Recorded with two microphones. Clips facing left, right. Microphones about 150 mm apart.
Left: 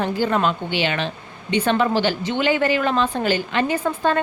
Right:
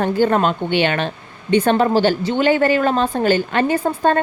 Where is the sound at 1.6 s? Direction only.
40° right (ahead or behind).